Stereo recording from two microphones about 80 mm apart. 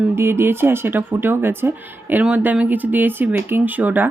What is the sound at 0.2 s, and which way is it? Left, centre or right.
Speech, right.